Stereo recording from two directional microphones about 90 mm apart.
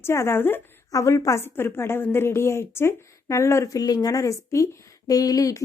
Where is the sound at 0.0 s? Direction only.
30° left (ahead or behind).